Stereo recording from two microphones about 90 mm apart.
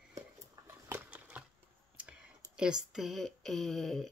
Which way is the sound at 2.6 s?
5° right (ahead or behind).